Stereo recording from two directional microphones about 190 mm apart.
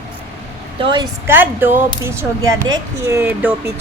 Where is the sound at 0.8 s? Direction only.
25° right (ahead or behind).